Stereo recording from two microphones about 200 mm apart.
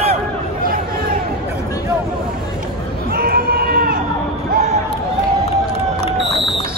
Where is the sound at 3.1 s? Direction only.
50° right (ahead or behind).